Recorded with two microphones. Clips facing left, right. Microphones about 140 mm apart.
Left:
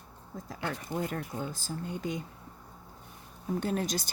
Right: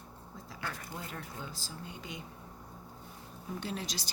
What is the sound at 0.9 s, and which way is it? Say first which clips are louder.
Speech: left 9 dB; 50° left (ahead or behind).